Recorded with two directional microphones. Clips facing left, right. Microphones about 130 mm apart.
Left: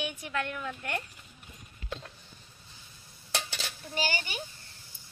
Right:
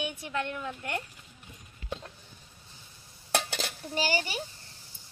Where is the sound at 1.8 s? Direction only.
10° right (ahead or behind).